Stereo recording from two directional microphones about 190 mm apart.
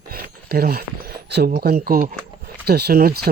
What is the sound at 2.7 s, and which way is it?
Speech, 55° right (ahead or behind).